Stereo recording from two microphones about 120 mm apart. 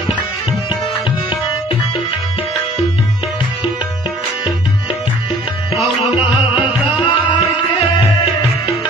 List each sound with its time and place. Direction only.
6.5 s music: 10° right (ahead or behind)